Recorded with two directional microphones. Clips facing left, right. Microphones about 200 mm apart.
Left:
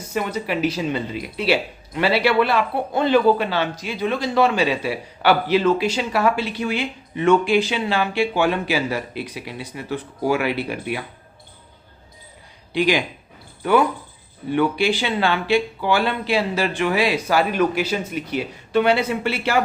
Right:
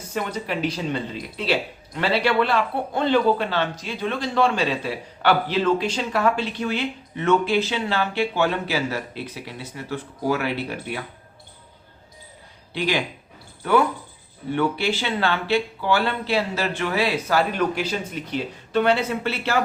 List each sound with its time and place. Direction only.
0.1 s a man's voice: 10° left (ahead or behind)
12.7 s a man's voice: 15° left (ahead or behind)